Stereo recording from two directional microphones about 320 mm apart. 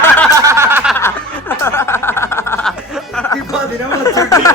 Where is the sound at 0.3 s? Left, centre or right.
Centre.